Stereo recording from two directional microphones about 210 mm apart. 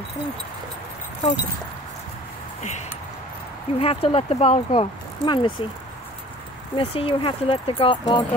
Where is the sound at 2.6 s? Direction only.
35° left (ahead or behind).